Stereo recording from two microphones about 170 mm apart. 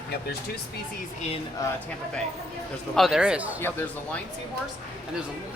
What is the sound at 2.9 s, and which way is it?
Speech, centre (ahead or behind).